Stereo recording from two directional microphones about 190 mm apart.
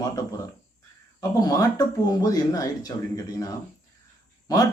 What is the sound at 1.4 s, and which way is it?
Speech, 20° left (ahead or behind).